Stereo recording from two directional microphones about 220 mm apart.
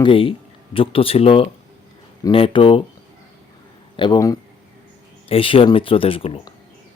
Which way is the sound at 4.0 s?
20° left (ahead or behind).